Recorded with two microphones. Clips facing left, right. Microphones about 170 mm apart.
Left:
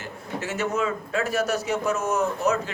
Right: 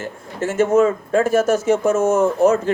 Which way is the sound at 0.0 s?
50° right (ahead or behind).